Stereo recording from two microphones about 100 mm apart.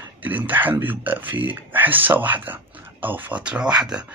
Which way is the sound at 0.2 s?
15° right (ahead or behind).